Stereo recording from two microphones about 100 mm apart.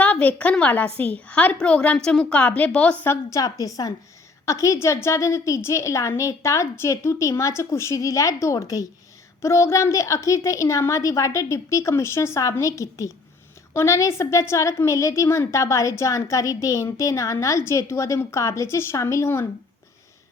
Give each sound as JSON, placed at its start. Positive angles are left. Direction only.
{"t": 0.0, "sound": "a woman's voice", "side_deg": 15}
{"t": 3.0, "sound": "a woman's voice", "side_deg": 25}